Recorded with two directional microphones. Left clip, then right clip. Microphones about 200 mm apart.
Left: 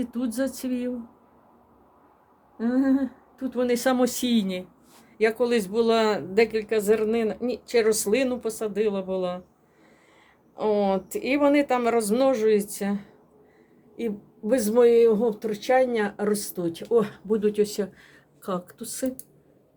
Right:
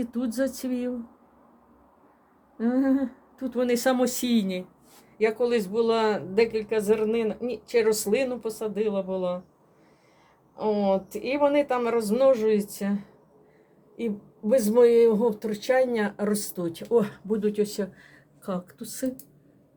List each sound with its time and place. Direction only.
0.0 s speech: centre (ahead or behind)
2.6 s speech: centre (ahead or behind)
5.1 s speech: 10° left (ahead or behind)
10.5 s speech: 20° left (ahead or behind)